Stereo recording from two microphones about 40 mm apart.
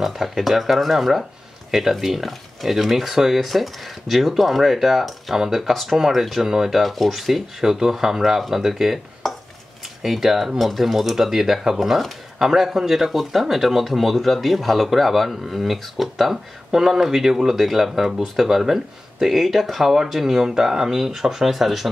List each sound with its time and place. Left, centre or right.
0.0 s speech: centre
6.7 s speech: centre